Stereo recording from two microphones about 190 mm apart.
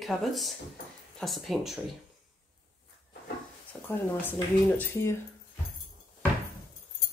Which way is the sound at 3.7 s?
10° left (ahead or behind).